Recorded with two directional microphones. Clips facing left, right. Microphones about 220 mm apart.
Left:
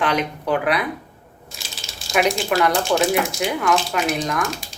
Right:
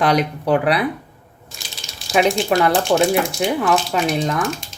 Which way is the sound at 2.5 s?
30° right (ahead or behind).